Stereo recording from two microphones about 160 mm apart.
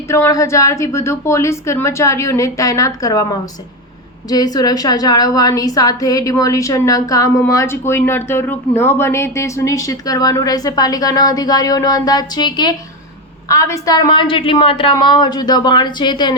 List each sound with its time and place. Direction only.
0.1 s a woman's voice: 20° left (ahead or behind)